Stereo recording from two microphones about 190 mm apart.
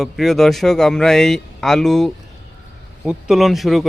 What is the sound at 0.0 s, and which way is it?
Speech, centre (ahead or behind).